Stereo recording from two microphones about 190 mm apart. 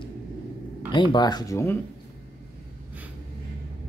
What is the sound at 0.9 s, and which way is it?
Speech, 25° left (ahead or behind).